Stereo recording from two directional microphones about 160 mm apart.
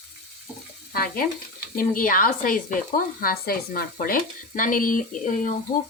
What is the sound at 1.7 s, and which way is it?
Speech, 60° left (ahead or behind).